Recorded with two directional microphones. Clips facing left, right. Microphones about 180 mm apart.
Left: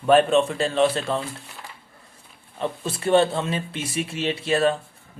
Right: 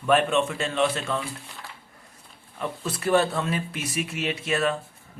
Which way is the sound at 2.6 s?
25° left (ahead or behind).